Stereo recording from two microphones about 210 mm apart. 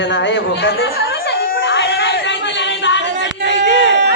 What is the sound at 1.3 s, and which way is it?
Music, 45° left (ahead or behind).